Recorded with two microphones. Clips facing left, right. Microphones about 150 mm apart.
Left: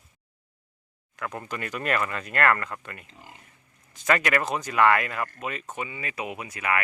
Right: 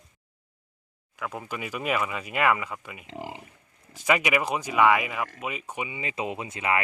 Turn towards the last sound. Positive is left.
turn(degrees=-25)  # may be behind; listen again after turning